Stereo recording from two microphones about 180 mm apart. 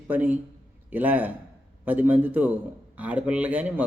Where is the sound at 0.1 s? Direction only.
10° right (ahead or behind).